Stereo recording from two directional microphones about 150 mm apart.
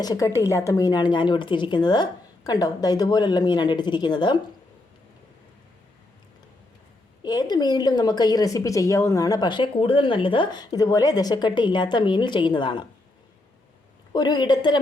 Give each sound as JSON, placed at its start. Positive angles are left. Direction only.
{"t": 0.0, "sound": "a woman's voice", "side_deg": 25}
{"t": 7.2, "sound": "a woman's voice", "side_deg": 30}
{"t": 14.1, "sound": "a woman's voice", "side_deg": 30}